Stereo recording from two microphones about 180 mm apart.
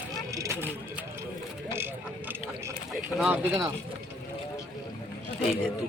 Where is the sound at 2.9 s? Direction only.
Centre (ahead or behind).